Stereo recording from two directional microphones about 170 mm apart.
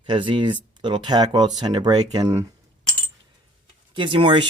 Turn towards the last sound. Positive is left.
turn(degrees=-30)  # may be behind; listen again after turning